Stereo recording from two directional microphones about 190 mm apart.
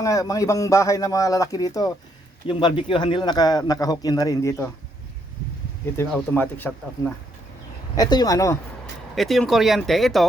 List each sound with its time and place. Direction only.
0.0 s speech: 20° left (ahead or behind)
6.1 s speech: 5° left (ahead or behind)
7.9 s speech: 20° left (ahead or behind)
9.1 s speech: centre (ahead or behind)